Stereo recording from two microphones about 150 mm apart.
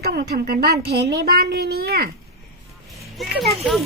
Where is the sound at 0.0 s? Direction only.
90° right.